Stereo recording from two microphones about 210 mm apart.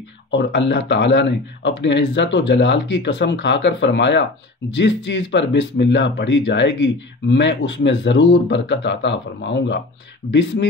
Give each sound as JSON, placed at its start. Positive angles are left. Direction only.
{"t": 0.3, "sound": "speech", "side_deg": 55}